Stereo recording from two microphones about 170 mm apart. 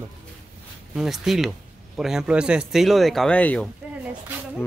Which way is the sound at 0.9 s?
Centre (ahead or behind).